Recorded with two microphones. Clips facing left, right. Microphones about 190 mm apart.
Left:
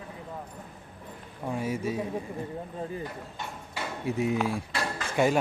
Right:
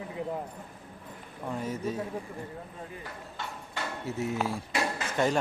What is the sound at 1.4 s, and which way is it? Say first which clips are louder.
Speech: left 2 dB; 10° left (ahead or behind).